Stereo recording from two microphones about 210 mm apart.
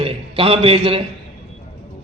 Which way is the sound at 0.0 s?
25° right (ahead or behind).